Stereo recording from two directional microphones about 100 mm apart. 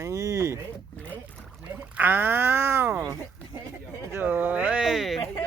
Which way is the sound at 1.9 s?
20° right (ahead or behind).